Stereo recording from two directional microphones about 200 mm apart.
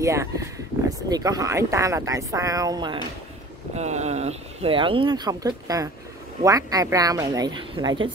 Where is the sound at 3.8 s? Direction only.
35° right (ahead or behind).